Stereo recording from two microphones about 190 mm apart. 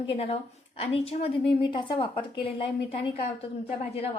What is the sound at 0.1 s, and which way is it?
A woman's voice, 30° left (ahead or behind).